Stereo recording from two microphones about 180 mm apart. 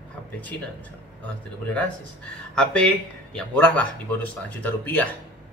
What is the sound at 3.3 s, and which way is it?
Speech, 5° left (ahead or behind).